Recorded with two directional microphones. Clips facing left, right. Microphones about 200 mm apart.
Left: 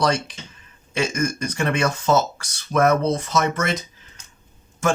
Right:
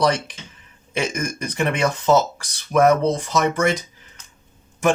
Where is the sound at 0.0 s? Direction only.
15° right (ahead or behind).